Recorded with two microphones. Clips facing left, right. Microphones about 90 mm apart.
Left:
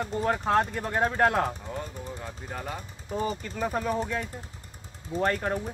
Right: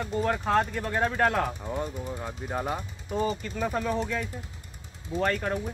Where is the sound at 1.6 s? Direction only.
15° right (ahead or behind).